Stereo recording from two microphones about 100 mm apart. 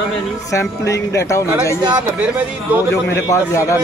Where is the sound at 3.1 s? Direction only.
30° left (ahead or behind).